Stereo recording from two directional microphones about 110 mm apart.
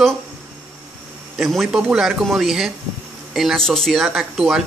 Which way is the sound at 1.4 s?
Centre (ahead or behind).